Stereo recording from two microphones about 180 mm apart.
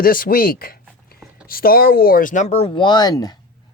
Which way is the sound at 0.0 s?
55° left (ahead or behind).